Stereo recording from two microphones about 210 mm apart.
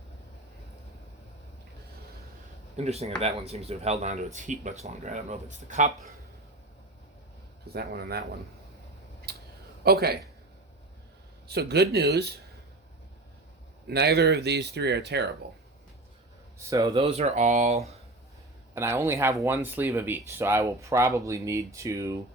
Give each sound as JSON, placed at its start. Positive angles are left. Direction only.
{"t": 2.7, "sound": "speech", "side_deg": -30}
{"t": 7.7, "sound": "speech", "side_deg": -50}
{"t": 9.3, "sound": "a sound", "side_deg": -50}
{"t": 9.8, "sound": "speech", "side_deg": -50}
{"t": 11.4, "sound": "speech", "side_deg": -50}
{"t": 13.8, "sound": "speech", "side_deg": -50}
{"t": 16.6, "sound": "speech", "side_deg": -15}
{"t": 16.9, "sound": "speech", "side_deg": -30}
{"t": 18.7, "sound": "speech", "side_deg": -10}